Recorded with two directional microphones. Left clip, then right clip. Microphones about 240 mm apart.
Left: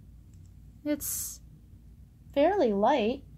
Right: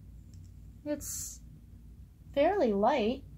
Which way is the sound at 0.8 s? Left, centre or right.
Left.